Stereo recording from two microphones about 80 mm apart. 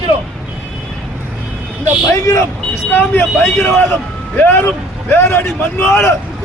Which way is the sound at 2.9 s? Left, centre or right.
Left.